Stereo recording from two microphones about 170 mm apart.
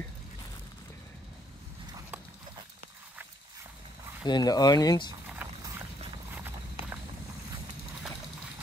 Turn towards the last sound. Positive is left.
turn(degrees=-10)  # may be behind; listen again after turning